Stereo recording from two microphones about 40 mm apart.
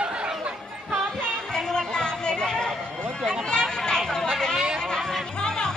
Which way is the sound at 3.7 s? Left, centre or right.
Centre.